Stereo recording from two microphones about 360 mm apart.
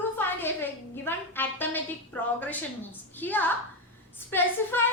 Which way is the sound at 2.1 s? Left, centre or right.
Centre.